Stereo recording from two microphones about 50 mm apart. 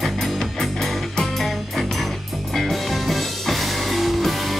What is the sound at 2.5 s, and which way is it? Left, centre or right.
Music, centre.